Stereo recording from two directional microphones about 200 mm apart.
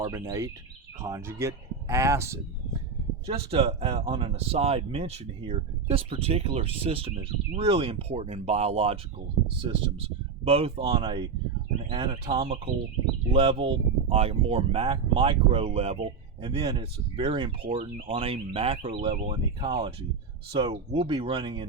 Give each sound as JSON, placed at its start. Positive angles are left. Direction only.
{"t": 0.0, "sound": "speech", "side_deg": -15}
{"t": 3.2, "sound": "speech", "side_deg": -30}